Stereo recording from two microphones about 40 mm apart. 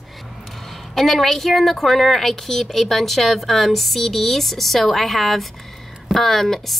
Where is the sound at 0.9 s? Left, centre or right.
Centre.